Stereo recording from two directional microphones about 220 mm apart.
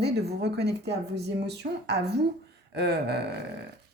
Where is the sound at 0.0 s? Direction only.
50° right (ahead or behind).